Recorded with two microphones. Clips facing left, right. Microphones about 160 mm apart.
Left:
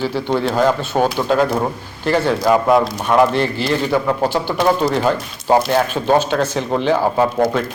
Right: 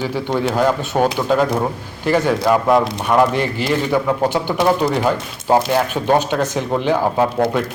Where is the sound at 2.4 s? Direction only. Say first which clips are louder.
Left 1 dB; 5° left (ahead or behind).